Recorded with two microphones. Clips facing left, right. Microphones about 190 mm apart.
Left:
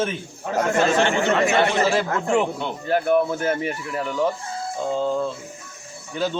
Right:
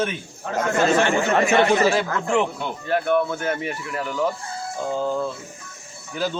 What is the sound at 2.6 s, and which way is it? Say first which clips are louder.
Speech: left 1 dB; 20° left (ahead or behind).